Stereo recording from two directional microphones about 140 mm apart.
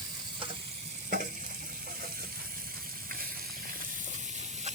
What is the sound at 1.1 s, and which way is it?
Frying, 85° right.